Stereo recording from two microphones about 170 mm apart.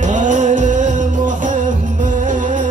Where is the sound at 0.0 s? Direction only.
45° right (ahead or behind).